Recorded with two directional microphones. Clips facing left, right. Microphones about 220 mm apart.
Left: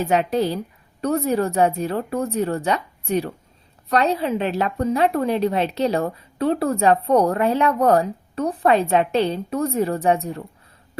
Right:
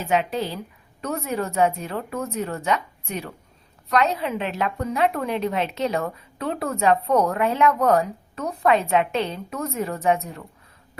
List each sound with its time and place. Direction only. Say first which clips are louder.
0.0 s a woman's voice: left 4 dB; 40° left (ahead or behind)